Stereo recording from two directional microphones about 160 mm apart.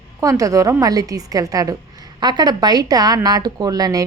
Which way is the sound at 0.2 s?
20° right (ahead or behind).